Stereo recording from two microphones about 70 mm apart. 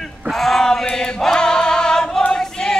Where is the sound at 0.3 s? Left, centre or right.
Centre.